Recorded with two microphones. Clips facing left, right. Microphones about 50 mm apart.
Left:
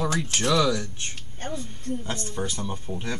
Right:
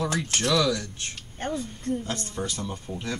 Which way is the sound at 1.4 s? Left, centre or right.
Centre.